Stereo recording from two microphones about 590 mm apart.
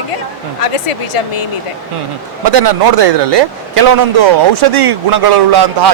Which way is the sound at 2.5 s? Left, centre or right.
Right.